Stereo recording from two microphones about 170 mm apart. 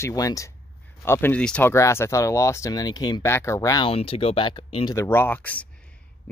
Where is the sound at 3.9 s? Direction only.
35° left (ahead or behind).